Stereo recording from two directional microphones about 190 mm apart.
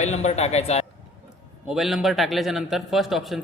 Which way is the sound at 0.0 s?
35° left (ahead or behind).